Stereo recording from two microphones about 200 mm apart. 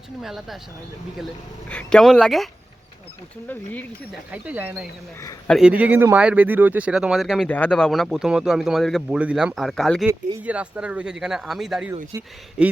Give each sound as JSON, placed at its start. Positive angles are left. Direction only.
{"t": 0.2, "sound": "speech", "side_deg": 0}
{"t": 1.7, "sound": "speech", "side_deg": 5}
{"t": 3.5, "sound": "speech", "side_deg": 10}
{"t": 4.3, "sound": "speech", "side_deg": -10}
{"t": 12.1, "sound": "speech", "side_deg": -15}
{"t": 12.6, "sound": "speech", "side_deg": -5}